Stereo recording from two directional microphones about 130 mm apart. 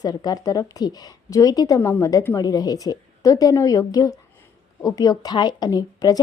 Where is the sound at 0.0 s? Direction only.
30° left (ahead or behind).